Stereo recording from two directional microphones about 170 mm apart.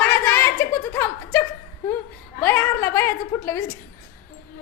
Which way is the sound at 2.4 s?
15° left (ahead or behind).